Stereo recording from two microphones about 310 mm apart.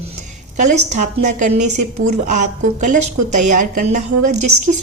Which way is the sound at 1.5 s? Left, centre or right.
Right.